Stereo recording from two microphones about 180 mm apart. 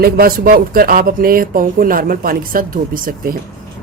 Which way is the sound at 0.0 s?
55° right (ahead or behind).